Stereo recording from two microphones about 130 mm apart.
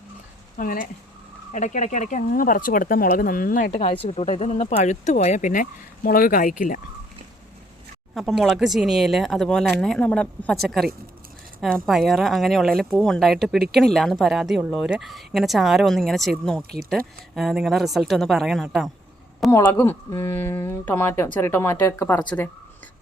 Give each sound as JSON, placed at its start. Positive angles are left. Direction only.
{"t": 0.5, "sound": "speech", "side_deg": 90}
{"t": 1.5, "sound": "speech", "side_deg": 70}
{"t": 3.8, "sound": "speech", "side_deg": 45}
{"t": 8.1, "sound": "speech", "side_deg": 0}
{"t": 19.5, "sound": "speech", "side_deg": 20}